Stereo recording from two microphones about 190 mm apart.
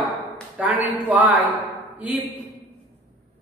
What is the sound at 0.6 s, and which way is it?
Speech, 10° right (ahead or behind).